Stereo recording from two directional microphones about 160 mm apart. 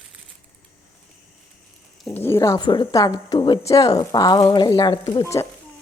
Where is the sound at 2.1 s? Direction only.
15° left (ahead or behind).